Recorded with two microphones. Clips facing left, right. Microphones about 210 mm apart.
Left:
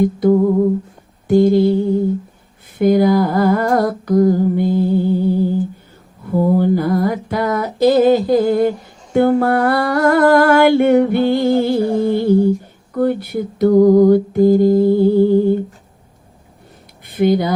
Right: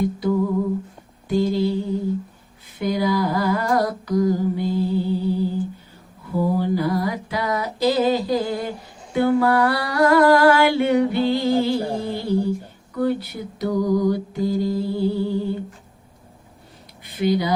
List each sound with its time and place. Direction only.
0.0 s humming: 50° left (ahead or behind)
9.1 s music: 50° left (ahead or behind)
12.9 s humming: 50° left (ahead or behind)
17.0 s a sound: 50° left (ahead or behind)